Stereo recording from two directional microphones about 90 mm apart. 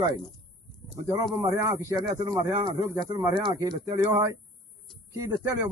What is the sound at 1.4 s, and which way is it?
Speech, 35° right (ahead or behind).